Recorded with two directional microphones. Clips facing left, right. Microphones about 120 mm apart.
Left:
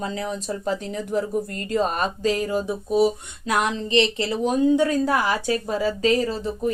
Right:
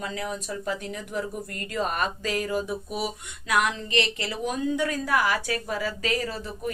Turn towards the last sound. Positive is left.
turn(degrees=25)  # may be behind; listen again after turning